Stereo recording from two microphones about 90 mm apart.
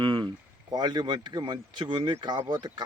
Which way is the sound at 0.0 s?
70° right (ahead or behind).